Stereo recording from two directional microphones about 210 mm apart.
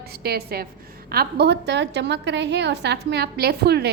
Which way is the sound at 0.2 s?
50° right (ahead or behind).